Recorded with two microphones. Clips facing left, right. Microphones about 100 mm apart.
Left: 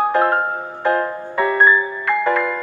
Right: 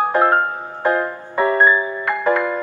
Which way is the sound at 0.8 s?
20° right (ahead or behind).